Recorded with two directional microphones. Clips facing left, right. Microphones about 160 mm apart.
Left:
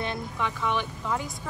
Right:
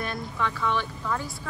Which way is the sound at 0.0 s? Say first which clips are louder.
Even; 20° left (ahead or behind).